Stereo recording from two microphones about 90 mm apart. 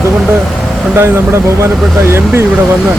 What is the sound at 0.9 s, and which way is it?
Speech, 25° right (ahead or behind).